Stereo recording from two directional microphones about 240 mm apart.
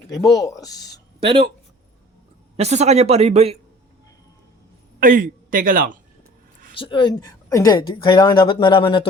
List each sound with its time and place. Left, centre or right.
0.1 s speech: centre
1.2 s speech: right
2.6 s speech: right
4.9 s a man's voice: right
6.7 s a woman's voice: left